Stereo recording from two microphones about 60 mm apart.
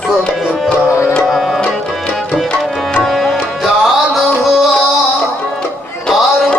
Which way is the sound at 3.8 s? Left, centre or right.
Centre.